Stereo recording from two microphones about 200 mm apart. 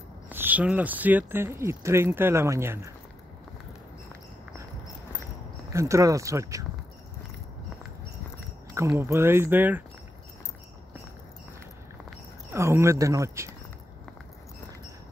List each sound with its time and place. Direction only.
0.3 s speech: 10° right (ahead or behind)
5.7 s speech: 15° right (ahead or behind)
8.7 s speech: 10° right (ahead or behind)
12.5 s speech: 15° right (ahead or behind)